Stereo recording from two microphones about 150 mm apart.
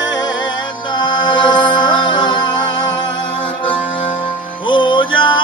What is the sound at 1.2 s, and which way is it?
Music, 30° left (ahead or behind).